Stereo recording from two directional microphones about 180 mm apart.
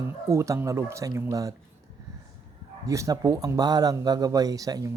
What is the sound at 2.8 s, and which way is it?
Speech, 15° right (ahead or behind).